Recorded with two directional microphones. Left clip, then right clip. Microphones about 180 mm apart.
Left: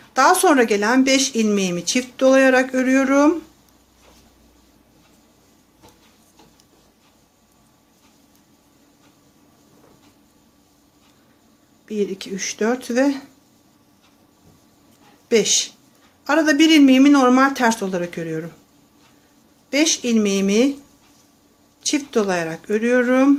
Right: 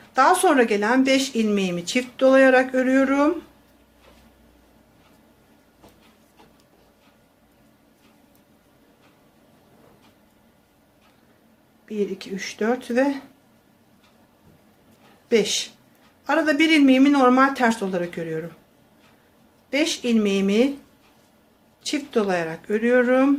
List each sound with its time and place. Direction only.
0.1 s speech: 20° left (ahead or behind)
11.9 s speech: 20° left (ahead or behind)
15.3 s speech: 15° left (ahead or behind)
19.7 s speech: 20° left (ahead or behind)
21.8 s speech: 20° left (ahead or behind)